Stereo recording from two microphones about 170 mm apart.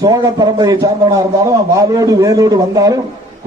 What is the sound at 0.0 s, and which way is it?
A man's voice, 20° right (ahead or behind).